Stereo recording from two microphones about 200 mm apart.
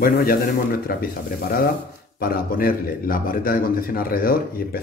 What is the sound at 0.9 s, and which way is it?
Speech, 45° left (ahead or behind).